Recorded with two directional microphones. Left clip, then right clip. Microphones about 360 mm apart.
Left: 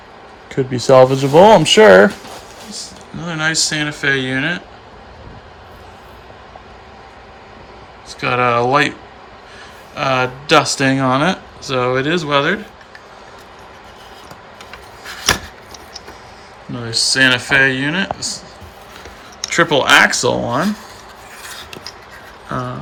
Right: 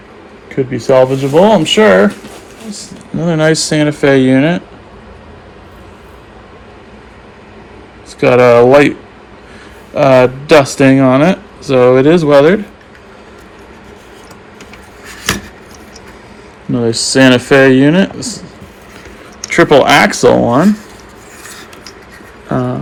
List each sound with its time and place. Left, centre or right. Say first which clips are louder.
0.4 s speech: right 2 dB; centre
2.7 s speech: right 8 dB; centre
8.2 s speech: right 9 dB; centre
9.9 s speech: right 10 dB; centre
16.7 s speech: right 5 dB; centre
19.5 s speech: right 5 dB; centre
22.4 s a sound: right 7 dB; centre